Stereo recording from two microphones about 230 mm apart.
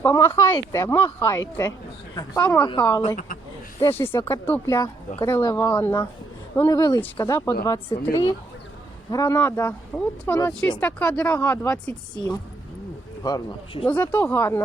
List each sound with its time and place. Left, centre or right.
0.0 s speech: centre
10.2 s speech: centre
13.2 s speech: centre
13.8 s speech: centre